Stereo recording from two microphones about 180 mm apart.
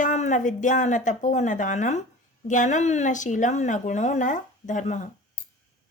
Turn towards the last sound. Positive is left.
turn(degrees=45)  # may be behind; listen again after turning